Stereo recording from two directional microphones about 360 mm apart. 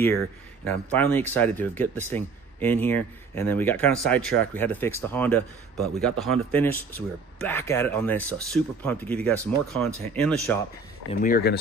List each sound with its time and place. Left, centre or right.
0.7 s speech: centre
11.1 s speech: left